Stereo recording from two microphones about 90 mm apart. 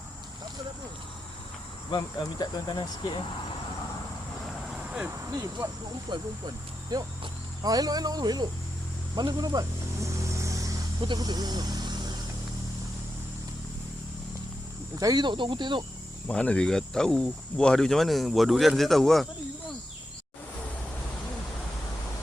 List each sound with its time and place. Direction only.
1.9 s speech: 55° left (ahead or behind)
4.7 s vehicle: 5° right (ahead or behind)
5.0 s speech: 35° right (ahead or behind)
6.1 s speech: 55° right (ahead or behind)
9.1 s a sound: 50° right (ahead or behind)
11.0 s speech: 55° right (ahead or behind)
14.9 s speech: 40° right (ahead or behind)
15.2 s speech: 65° right (ahead or behind)
16.2 s speech: 15° left (ahead or behind)